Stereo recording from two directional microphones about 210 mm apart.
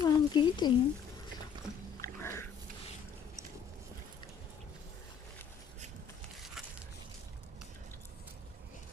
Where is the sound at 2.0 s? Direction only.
10° left (ahead or behind).